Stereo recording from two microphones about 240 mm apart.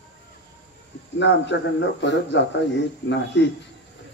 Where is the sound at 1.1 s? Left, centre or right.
Left.